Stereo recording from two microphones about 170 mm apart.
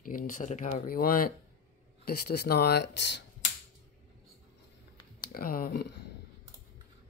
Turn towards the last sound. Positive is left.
turn(degrees=65)  # may be behind; listen again after turning